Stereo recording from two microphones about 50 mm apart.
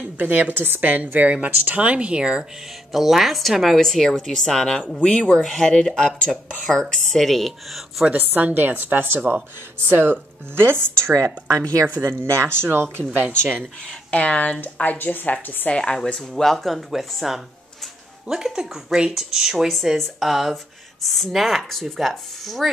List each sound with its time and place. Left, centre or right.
0.2 s a woman's voice: right; by 2.4 s centre
2.9 s speech: centre
8.1 s a woman's voice: right
11.1 s speech: right
12.0 s speech: right
14.1 s speech: left
14.6 s speech: left
15.7 s speech: centre
19.7 s speech: centre